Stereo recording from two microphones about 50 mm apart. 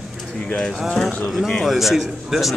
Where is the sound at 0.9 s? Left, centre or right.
Centre.